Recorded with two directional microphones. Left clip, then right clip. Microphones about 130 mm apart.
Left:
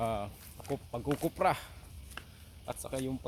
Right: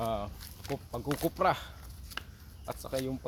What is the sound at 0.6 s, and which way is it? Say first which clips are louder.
Speech: even; 90° right.